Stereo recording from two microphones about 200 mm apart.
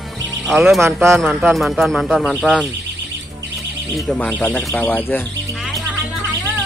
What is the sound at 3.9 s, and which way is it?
Speech, 5° left (ahead or behind).